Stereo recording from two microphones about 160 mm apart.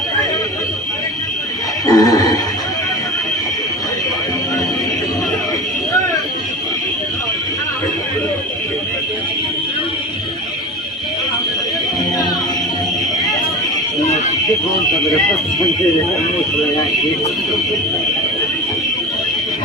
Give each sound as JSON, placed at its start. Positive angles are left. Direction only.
{"t": 1.9, "sound": "neigh", "side_deg": 25}